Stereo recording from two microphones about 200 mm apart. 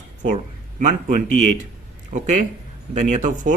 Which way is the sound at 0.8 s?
40° right (ahead or behind).